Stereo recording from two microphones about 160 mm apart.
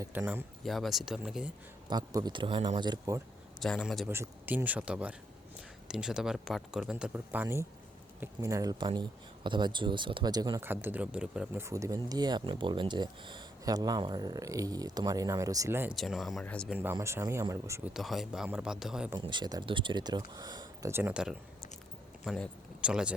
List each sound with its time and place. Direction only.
0.0 s speech: 15° right (ahead or behind)
0.6 s speech: centre (ahead or behind)
1.9 s speech: 25° right (ahead or behind)
2.8 s speech: 25° right (ahead or behind)
3.6 s speech: centre (ahead or behind)
4.1 s speech: 15° right (ahead or behind)
10.6 s speech: 15° right (ahead or behind)
16.0 s speech: centre (ahead or behind)
16.6 s speech: 10° right (ahead or behind)
17.9 s speech: centre (ahead or behind)
19.2 s speech: 30° right (ahead or behind); by 23.1 s 5° right (ahead or behind)